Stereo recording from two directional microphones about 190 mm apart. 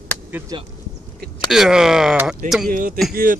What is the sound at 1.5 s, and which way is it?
Speech, 5° right (ahead or behind).